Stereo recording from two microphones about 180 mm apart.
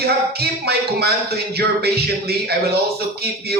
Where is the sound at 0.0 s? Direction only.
60° right (ahead or behind).